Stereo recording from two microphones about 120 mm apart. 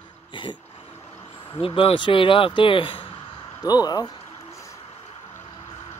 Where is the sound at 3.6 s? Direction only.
35° left (ahead or behind).